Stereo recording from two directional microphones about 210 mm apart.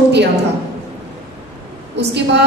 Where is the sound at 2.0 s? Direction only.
55° right (ahead or behind).